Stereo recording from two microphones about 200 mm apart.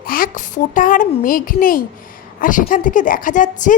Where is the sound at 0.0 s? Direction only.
45° left (ahead or behind).